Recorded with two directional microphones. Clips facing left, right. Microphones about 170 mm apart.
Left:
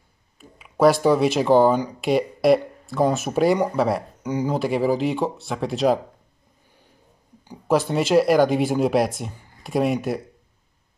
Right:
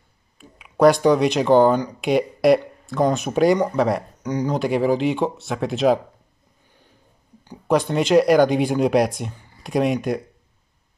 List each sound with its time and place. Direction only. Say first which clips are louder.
0.4 s speech: right 2 dB; centre (ahead or behind)
7.4 s speech: right 1 dB; 5° left (ahead or behind)